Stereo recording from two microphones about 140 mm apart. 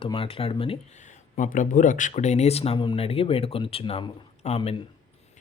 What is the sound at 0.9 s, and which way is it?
Speech, 60° left (ahead or behind).